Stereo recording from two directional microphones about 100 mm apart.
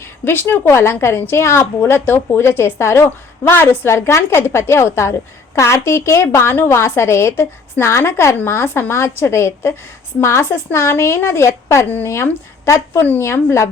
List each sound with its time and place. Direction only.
0.3 s speech: 20° left (ahead or behind)